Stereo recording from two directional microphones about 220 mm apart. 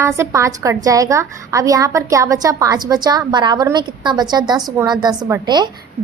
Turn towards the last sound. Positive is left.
turn(degrees=-20)  # may be behind; listen again after turning